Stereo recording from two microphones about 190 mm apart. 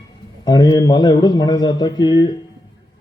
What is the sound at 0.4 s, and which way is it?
A man's voice, 20° left (ahead or behind).